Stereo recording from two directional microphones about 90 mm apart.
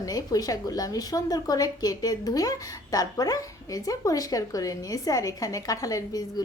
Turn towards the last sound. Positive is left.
turn(degrees=40)  # may be behind; listen again after turning